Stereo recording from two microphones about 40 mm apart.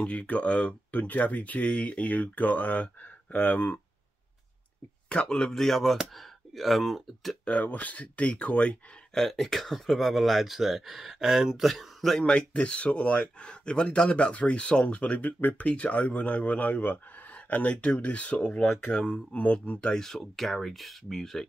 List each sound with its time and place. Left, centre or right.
0.0 s speech: left
5.1 s speech: left
5.5 s speech: centre
7.4 s speech: left
9.1 s speech: centre
11.7 s speech: centre
12.3 s speech: left
15.0 s speech: left
15.6 s speech: left
19.1 s speech: left
19.9 s speech: centre